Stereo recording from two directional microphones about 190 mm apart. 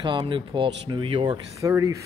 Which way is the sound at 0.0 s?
25° right (ahead or behind).